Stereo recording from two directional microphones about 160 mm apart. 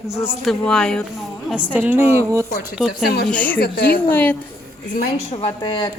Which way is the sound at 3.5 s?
75° left (ahead or behind).